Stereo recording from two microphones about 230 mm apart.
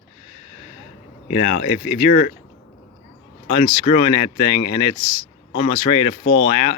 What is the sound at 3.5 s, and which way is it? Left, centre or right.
Speech, left.